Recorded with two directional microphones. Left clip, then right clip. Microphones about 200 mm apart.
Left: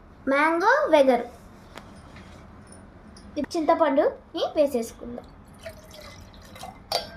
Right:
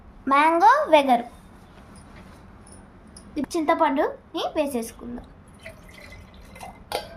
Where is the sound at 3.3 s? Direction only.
45° right (ahead or behind).